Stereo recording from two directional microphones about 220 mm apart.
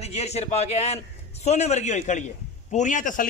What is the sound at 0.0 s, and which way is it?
A man's voice, 30° left (ahead or behind).